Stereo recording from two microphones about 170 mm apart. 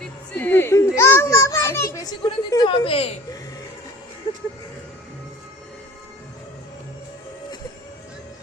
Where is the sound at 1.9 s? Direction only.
20° left (ahead or behind).